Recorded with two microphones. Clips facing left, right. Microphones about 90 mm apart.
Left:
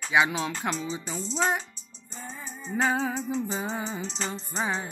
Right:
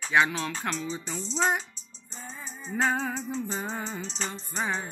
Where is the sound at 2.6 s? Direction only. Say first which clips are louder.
Left 1 dB; 10° left (ahead or behind).